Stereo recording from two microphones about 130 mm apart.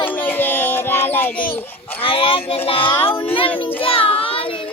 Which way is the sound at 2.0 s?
45° left (ahead or behind).